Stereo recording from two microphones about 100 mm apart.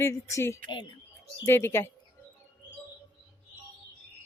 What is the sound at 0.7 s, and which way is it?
Speech, 50° left (ahead or behind).